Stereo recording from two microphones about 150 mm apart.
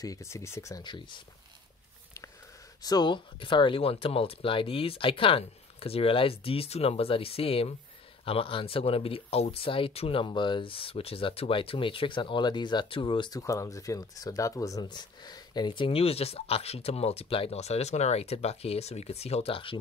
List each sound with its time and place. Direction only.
0.0 s speech: 20° left (ahead or behind)
2.8 s speech: 25° left (ahead or behind)
13.4 s speech: 20° left (ahead or behind); by 19.8 s 35° left (ahead or behind)